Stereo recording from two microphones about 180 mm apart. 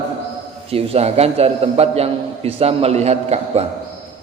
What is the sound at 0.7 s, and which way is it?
A man's voice, 35° right (ahead or behind).